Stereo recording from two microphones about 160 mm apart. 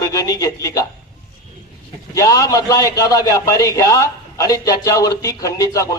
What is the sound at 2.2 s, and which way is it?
A man's voice, 20° left (ahead or behind).